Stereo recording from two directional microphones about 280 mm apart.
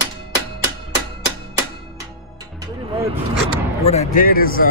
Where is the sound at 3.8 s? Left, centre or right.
Left.